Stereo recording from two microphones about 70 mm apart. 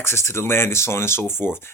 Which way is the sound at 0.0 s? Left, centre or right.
Left.